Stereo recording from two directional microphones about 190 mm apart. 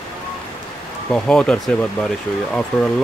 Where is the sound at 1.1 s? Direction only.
5° left (ahead or behind).